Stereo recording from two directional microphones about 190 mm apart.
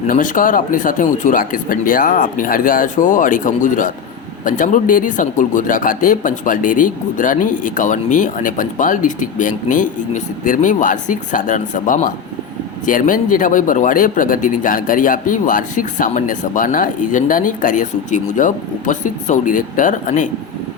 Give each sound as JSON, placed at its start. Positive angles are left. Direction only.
{"t": 0.1, "sound": "speech", "side_deg": 45}